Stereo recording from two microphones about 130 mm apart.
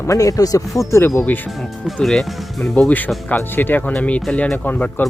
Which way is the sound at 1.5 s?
Centre (ahead or behind).